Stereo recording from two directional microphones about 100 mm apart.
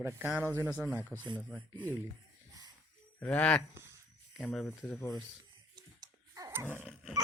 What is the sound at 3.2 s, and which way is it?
Speech, 15° left (ahead or behind).